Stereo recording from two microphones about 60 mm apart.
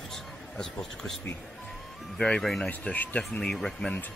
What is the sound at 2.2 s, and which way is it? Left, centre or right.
Speech, centre.